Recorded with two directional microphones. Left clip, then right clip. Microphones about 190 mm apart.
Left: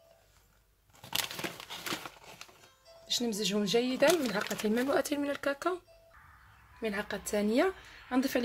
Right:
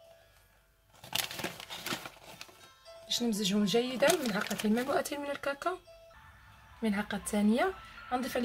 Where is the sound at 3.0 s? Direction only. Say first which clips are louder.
Even; 30° left (ahead or behind).